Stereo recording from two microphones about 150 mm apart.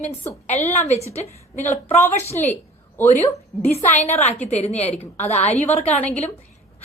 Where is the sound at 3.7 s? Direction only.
45° left (ahead or behind).